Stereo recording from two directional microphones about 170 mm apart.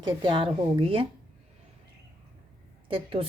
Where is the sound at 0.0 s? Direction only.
30° right (ahead or behind).